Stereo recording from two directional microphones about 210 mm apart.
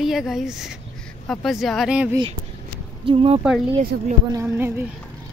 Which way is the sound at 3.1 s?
25° right (ahead or behind).